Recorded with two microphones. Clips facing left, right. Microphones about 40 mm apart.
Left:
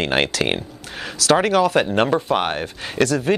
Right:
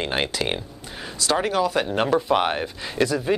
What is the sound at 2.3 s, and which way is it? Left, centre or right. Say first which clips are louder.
Speech: even; left.